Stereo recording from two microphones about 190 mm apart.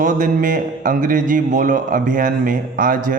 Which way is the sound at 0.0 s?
45° right (ahead or behind).